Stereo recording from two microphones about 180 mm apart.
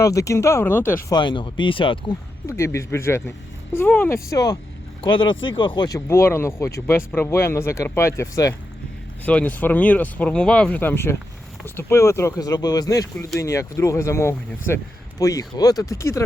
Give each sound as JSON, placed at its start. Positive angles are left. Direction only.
{"t": 0.0, "sound": "speech", "side_deg": 15}
{"t": 1.1, "sound": "speech", "side_deg": 25}
{"t": 2.5, "sound": "speech", "side_deg": 15}